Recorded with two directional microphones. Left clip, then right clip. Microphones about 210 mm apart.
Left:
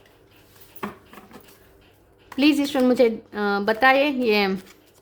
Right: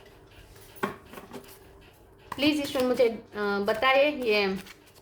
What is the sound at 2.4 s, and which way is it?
A woman's voice, 50° left (ahead or behind).